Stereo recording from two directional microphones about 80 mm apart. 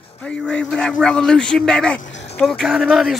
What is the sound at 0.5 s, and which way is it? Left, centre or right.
A man's voice, centre.